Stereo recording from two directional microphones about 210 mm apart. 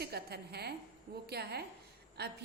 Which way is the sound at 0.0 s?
50° right (ahead or behind).